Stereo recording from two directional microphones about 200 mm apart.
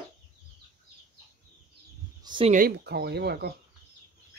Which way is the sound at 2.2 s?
25° right (ahead or behind).